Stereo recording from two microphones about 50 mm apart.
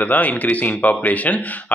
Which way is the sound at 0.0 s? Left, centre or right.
Left.